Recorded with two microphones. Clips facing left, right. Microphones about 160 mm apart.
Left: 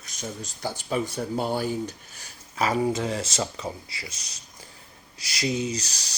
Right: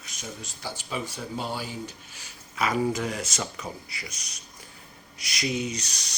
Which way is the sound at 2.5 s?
30° left (ahead or behind).